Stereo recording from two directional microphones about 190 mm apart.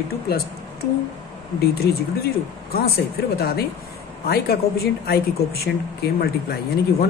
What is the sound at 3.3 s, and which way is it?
Speech, 55° left (ahead or behind).